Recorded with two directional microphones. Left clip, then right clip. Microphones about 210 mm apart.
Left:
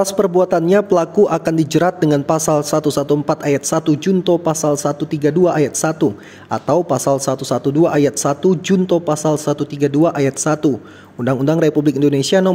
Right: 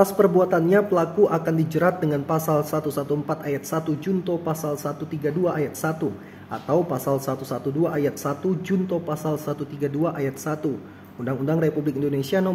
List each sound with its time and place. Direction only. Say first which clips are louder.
0.0 s a man's voice: left 3 dB; 40° left (ahead or behind)